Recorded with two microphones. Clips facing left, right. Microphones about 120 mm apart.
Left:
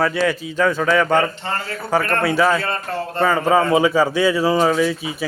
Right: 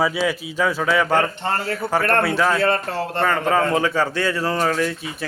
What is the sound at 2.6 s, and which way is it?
Speech, 70° right (ahead or behind).